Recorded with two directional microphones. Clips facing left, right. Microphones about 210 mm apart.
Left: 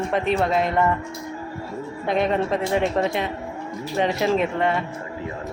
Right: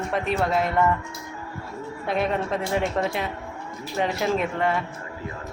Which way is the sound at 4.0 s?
Centre (ahead or behind).